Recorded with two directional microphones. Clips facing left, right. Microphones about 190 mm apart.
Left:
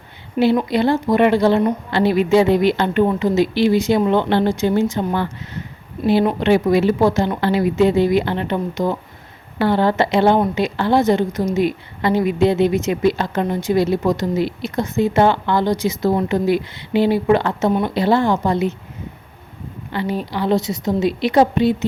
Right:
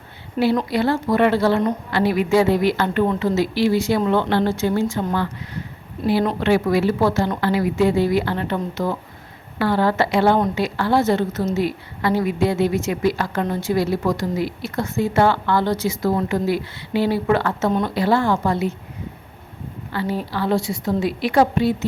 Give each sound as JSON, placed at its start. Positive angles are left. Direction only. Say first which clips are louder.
{"t": 0.4, "sound": "a woman's voice", "louder": "left 3 dB", "side_deg": 10}
{"t": 6.4, "sound": "a woman's voice", "louder": "left 3 dB", "side_deg": 20}
{"t": 17.7, "sound": "speech", "louder": "left 3 dB", "side_deg": 10}
{"t": 17.9, "sound": "a woman's voice", "louder": "left 2 dB", "side_deg": 20}
{"t": 19.9, "sound": "a woman's voice", "louder": "left 2 dB", "side_deg": 20}